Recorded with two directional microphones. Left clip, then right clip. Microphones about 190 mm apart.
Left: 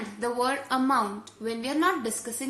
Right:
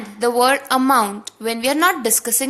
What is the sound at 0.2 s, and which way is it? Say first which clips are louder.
A woman's voice: right 12 dB; 45° right (ahead or behind).